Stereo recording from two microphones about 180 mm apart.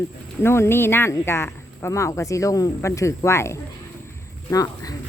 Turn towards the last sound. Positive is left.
turn(degrees=20)  # may be behind; listen again after turning